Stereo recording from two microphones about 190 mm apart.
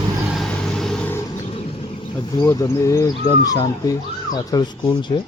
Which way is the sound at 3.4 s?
20° left (ahead or behind).